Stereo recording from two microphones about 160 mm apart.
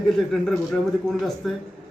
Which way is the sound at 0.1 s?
Centre (ahead or behind).